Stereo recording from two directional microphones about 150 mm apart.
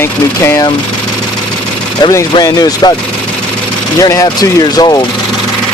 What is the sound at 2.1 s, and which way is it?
Speech, 20° left (ahead or behind).